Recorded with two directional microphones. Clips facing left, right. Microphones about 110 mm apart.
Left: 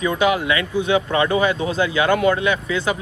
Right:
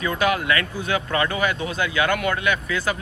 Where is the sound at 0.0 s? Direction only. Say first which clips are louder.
Left 3 dB; 20° left (ahead or behind).